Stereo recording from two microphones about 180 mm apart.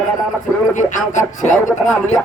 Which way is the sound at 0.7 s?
45° left (ahead or behind).